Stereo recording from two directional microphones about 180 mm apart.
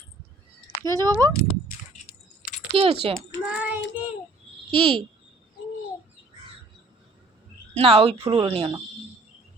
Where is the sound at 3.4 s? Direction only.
5° right (ahead or behind).